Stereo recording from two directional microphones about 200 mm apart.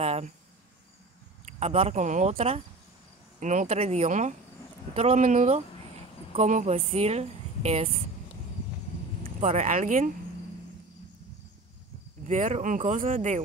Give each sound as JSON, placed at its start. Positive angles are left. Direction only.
{"t": 0.0, "sound": "cricket", "side_deg": -30}
{"t": 1.4, "sound": "speech", "side_deg": -30}
{"t": 9.4, "sound": "speech", "side_deg": -40}
{"t": 12.3, "sound": "speech", "side_deg": -35}